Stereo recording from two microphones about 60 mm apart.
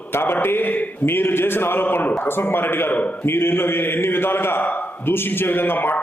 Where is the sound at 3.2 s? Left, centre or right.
Left.